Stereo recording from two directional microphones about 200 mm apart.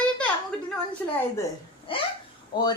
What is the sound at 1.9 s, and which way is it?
Speech, 25° left (ahead or behind).